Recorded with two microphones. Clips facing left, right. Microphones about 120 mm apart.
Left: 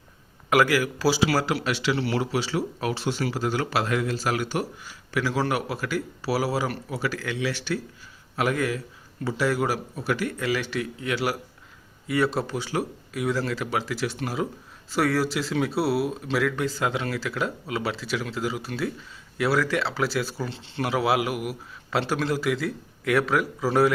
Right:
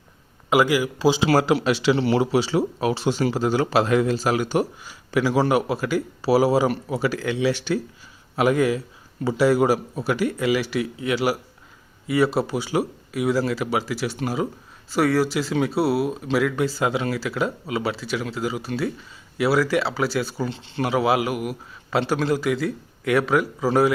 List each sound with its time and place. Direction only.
0.5 s speech: 15° right (ahead or behind); by 23.9 s centre (ahead or behind)